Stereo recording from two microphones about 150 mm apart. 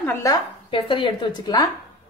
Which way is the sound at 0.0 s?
20° left (ahead or behind).